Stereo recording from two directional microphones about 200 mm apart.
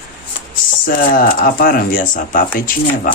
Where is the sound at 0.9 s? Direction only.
45° left (ahead or behind).